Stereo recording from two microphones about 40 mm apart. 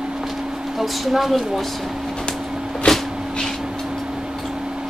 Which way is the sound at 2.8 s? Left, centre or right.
Left.